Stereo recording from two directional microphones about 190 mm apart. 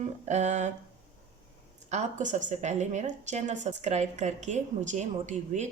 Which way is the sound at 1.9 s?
40° right (ahead or behind).